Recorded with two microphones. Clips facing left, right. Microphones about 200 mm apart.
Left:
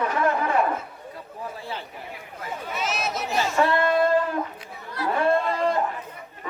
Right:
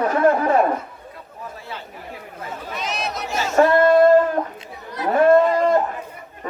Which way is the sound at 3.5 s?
45° right (ahead or behind).